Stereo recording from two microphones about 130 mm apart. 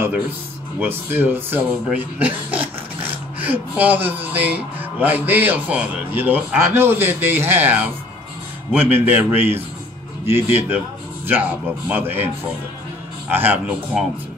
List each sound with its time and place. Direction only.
0.7 s speech: 15° right (ahead or behind)
8.9 s speech: 15° right (ahead or behind)
13.3 s speech: 15° right (ahead or behind)